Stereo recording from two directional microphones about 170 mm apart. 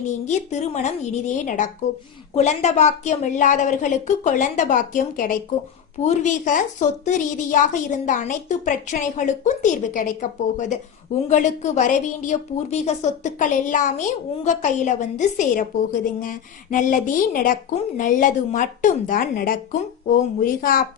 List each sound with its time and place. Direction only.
0.3 s a woman's voice: 40° left (ahead or behind)